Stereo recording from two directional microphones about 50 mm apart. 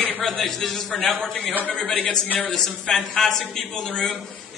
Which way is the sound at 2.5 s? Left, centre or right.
Centre.